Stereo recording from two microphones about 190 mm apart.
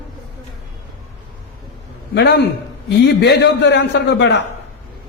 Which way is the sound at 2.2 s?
60° left (ahead or behind).